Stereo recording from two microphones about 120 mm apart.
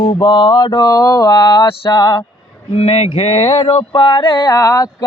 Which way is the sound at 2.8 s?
65° left (ahead or behind).